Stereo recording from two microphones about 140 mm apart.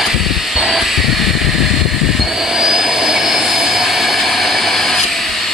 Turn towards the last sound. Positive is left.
turn(degrees=0)  # may be behind; listen again after turning